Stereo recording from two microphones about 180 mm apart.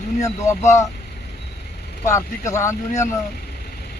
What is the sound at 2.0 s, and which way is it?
Speech, 15° left (ahead or behind).